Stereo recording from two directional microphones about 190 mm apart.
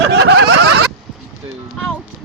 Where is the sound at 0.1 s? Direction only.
60° right (ahead or behind).